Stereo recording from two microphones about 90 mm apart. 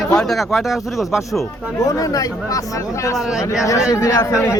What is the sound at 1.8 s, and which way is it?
Speech, 40° left (ahead or behind).